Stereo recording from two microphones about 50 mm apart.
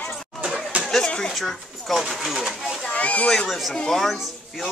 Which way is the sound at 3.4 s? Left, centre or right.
Centre.